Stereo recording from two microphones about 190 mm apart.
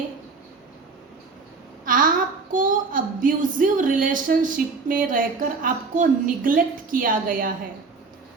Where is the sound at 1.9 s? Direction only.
45° right (ahead or behind).